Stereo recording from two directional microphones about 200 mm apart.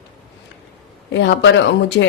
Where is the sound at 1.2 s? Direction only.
65° left (ahead or behind).